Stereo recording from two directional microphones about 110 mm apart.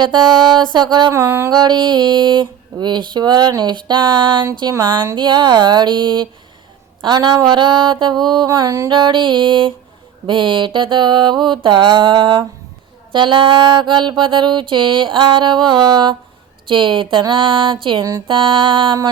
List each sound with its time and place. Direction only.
0.0 s mantra: 45° right (ahead or behind)
1.1 s a sound: 25° right (ahead or behind)
1.5 s mantra: 40° right (ahead or behind)